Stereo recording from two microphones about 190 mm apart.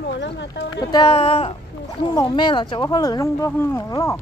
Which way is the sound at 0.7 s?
20° left (ahead or behind).